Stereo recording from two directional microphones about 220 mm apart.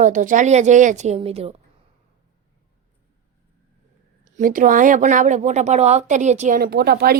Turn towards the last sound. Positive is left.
turn(degrees=-45)  # may be behind; listen again after turning